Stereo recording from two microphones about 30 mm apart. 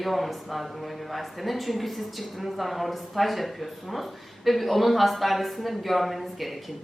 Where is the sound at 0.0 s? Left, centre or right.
Centre.